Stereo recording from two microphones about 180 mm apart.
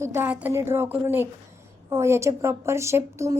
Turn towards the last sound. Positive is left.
turn(degrees=-15)  # may be behind; listen again after turning